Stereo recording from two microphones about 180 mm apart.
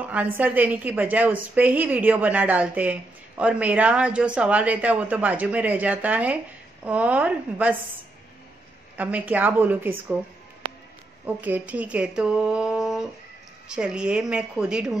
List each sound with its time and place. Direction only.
0.0 s a woman's voice: 10° right (ahead or behind)
8.9 s a woman's voice: 10° right (ahead or behind)
11.2 s speech: 10° right (ahead or behind)